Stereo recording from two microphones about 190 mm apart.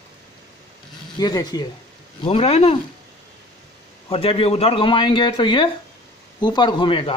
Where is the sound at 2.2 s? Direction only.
30° left (ahead or behind).